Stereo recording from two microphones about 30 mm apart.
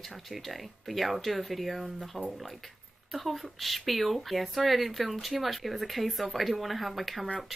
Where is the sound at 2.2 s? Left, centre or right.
Left.